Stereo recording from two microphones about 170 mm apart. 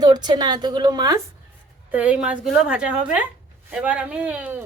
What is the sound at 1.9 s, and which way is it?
Speech, 10° right (ahead or behind).